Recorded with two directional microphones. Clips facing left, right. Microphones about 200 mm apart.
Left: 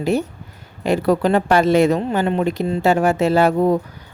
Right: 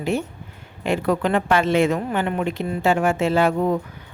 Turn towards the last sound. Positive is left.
turn(degrees=35)  # may be behind; listen again after turning